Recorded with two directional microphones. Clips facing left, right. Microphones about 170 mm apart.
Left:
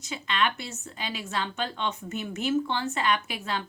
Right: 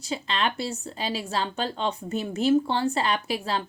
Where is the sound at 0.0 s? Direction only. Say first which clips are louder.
Right 1 dB; 30° right (ahead or behind).